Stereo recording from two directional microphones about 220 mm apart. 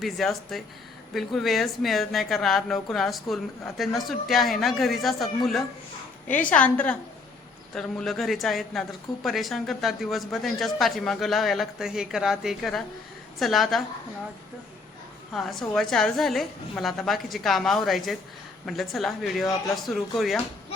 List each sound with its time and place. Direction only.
0.0 s speech: centre (ahead or behind)
6.2 s a woman's voice: 35° left (ahead or behind)
6.5 s a woman's voice: 5° left (ahead or behind)
15.3 s speech: centre (ahead or behind)